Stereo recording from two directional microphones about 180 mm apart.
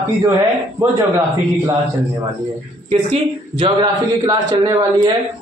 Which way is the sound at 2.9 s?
30° right (ahead or behind).